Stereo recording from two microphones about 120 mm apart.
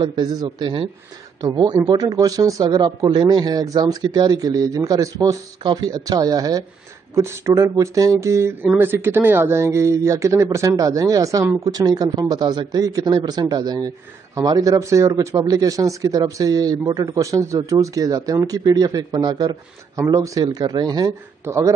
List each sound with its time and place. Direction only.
0.0 s speech: 40° right (ahead or behind)